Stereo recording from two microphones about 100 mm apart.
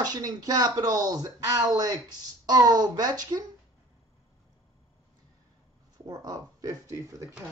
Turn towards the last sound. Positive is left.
turn(degrees=-30)  # may be behind; listen again after turning